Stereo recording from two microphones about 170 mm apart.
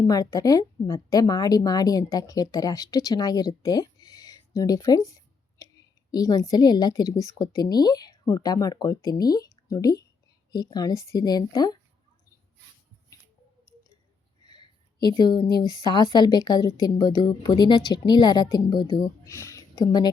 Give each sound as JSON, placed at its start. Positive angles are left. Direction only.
{"t": 0.0, "sound": "a woman's voice", "side_deg": 20}
{"t": 14.4, "sound": "a woman's voice", "side_deg": 25}